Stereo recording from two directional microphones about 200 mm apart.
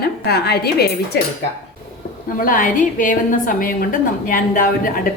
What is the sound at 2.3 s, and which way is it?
A woman's voice, 45° left (ahead or behind).